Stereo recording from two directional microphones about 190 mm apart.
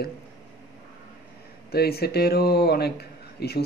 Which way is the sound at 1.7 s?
55° left (ahead or behind).